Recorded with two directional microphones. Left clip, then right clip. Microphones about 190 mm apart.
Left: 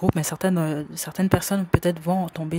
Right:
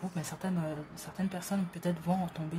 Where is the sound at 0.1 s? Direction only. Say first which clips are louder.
Left 14 dB; 45° left (ahead or behind).